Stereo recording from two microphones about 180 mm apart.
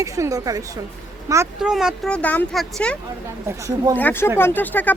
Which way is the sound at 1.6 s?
5° right (ahead or behind).